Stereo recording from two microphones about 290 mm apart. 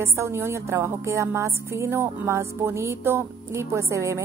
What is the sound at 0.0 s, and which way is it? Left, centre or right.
A woman's voice, centre.